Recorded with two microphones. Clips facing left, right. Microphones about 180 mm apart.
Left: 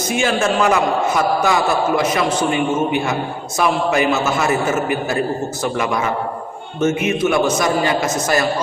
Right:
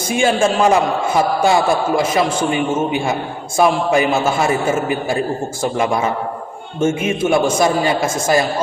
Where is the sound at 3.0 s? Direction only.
30° right (ahead or behind).